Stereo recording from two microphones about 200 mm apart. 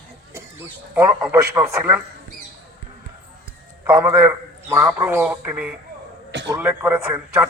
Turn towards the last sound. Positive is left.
turn(degrees=-10)  # may be behind; listen again after turning